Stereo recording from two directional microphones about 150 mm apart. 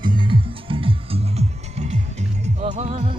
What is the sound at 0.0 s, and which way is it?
Music, 30° right (ahead or behind).